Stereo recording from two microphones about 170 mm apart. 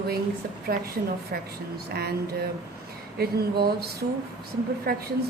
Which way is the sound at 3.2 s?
70° right (ahead or behind).